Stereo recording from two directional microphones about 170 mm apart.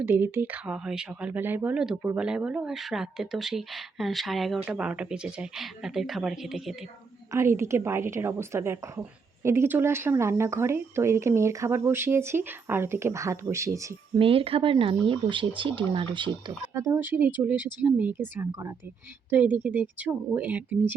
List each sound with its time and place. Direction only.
0.0 s speech: 10° right (ahead or behind)
7.3 s a woman's voice: 15° right (ahead or behind)
14.2 s a woman's voice: 35° right (ahead or behind); by 20.9 s 10° right (ahead or behind)